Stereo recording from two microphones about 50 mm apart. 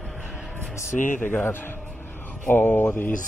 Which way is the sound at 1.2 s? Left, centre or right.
Left.